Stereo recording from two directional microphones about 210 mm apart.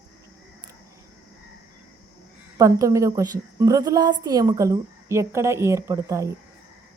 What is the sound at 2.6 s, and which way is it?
A woman's voice, 15° right (ahead or behind).